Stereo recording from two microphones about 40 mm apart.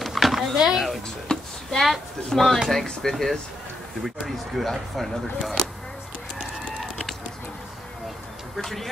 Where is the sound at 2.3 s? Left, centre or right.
Centre.